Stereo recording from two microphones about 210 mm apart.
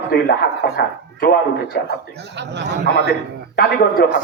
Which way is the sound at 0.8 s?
45° left (ahead or behind).